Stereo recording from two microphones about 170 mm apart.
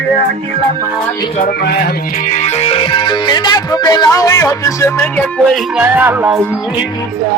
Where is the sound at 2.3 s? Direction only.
40° left (ahead or behind); by 5.5 s 10° left (ahead or behind).